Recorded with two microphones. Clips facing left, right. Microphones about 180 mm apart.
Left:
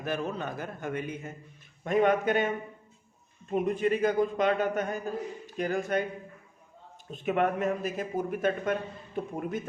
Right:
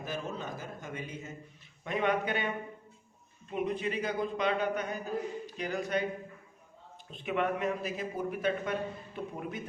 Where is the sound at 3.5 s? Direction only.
45° left (ahead or behind).